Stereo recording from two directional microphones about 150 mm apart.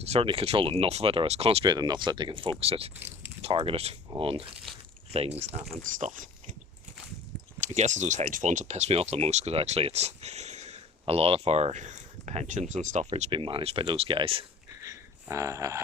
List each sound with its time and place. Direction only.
0.0 s speech: 40° right (ahead or behind)
1.6 s speech: 30° right (ahead or behind)
4.7 s a sound: centre (ahead or behind)
5.4 s speech: 45° right (ahead or behind)
5.8 s speech: 55° right (ahead or behind)
7.6 s speech: 55° right (ahead or behind)
13.1 s speech: 35° right (ahead or behind)
14.8 s a sound: 20° right (ahead or behind)